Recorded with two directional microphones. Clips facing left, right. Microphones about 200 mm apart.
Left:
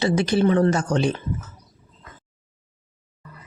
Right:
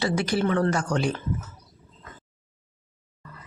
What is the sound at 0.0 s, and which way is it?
Speech, 20° left (ahead or behind).